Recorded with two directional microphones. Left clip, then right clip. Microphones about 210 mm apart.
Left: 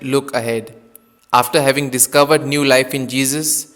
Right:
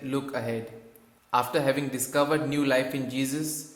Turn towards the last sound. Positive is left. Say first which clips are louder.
# left 11 dB
turn(degrees=45)  # may be behind; listen again after turning